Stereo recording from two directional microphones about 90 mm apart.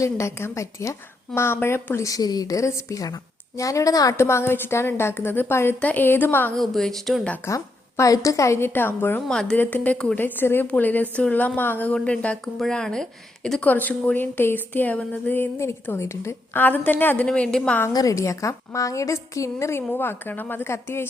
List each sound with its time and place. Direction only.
0.0 s a woman's voice: 35° left (ahead or behind)
6.6 s a woman's voice: 5° left (ahead or behind)
7.4 s a woman's voice: 35° left (ahead or behind)
9.2 s a woman's voice: 5° left (ahead or behind)
9.6 s a woman's voice: 20° left (ahead or behind)
13.7 s speech: 20° left (ahead or behind)
16.6 s speech: 20° left (ahead or behind)
17.2 s a woman's voice: 10° left (ahead or behind)
17.9 s a woman's voice: 40° left (ahead or behind)